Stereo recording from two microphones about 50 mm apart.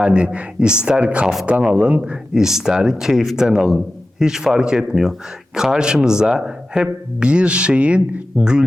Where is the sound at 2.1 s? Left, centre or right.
Centre.